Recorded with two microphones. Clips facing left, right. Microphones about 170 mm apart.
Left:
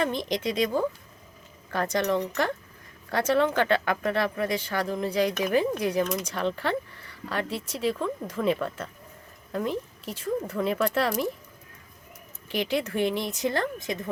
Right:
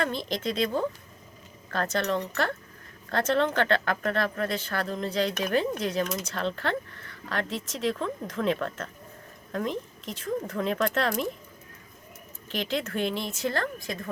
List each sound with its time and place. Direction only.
0.0 s speech: 15° left (ahead or behind)
12.5 s speech: 10° left (ahead or behind)